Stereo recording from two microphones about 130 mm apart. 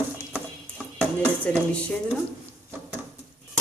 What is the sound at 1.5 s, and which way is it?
Speech, 10° left (ahead or behind).